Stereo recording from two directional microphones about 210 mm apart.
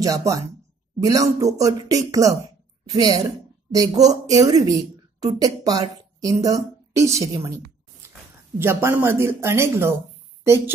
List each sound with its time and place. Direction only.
0.0 s a woman's voice: 15° right (ahead or behind)